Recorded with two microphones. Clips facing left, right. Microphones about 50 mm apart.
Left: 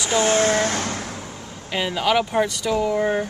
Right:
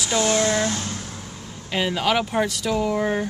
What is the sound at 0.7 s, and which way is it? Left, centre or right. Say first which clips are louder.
Vehicle: left 5 dB; left.